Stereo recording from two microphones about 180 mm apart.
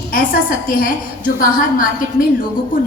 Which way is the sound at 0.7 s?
50° left (ahead or behind).